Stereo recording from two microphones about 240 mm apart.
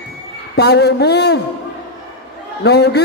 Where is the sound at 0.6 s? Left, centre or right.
Left.